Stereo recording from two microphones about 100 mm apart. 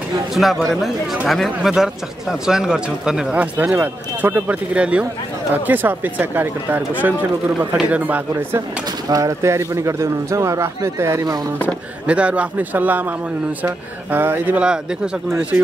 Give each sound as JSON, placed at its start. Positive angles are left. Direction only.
{"t": 0.3, "sound": "a man's voice", "side_deg": 0}
{"t": 9.1, "sound": "a man's voice", "side_deg": -35}
{"t": 12.1, "sound": "speech", "side_deg": -10}